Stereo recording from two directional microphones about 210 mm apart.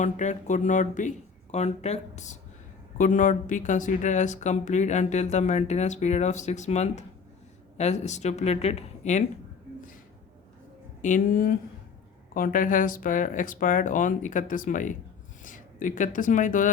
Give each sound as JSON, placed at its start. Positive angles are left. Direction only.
{"t": 0.0, "sound": "speech", "side_deg": 35}
{"t": 11.0, "sound": "speech", "side_deg": 40}